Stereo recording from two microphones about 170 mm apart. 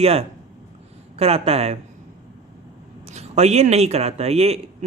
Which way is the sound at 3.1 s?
40° right (ahead or behind).